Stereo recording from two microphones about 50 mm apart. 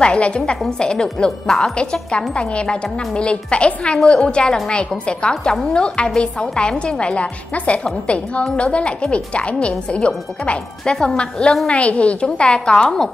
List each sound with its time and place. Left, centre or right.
0.0 s speech: left
5.3 s speech: centre